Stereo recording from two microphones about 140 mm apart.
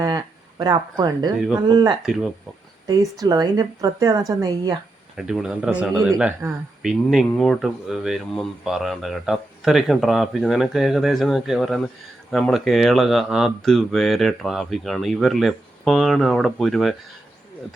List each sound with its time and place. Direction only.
0.0 s a woman's voice: 30° right (ahead or behind)
2.0 s speech: 5° right (ahead or behind)
2.8 s a woman's voice: 25° right (ahead or behind)
5.1 s speech: 5° right (ahead or behind)